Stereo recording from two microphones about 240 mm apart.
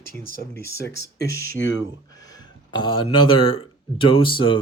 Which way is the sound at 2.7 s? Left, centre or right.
Centre.